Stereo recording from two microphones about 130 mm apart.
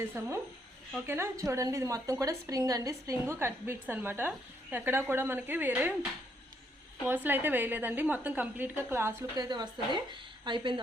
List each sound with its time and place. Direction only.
0.2 s a woman's voice: 20° right (ahead or behind)
7.0 s a woman's voice: 15° right (ahead or behind)
9.4 s a woman's voice: 35° right (ahead or behind)